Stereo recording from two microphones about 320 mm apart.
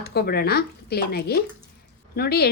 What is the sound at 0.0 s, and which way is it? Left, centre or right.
Speech, left.